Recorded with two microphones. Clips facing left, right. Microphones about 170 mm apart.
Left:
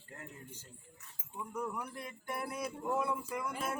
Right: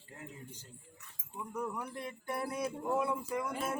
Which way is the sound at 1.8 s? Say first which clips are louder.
Right 3 dB; 35° right (ahead or behind).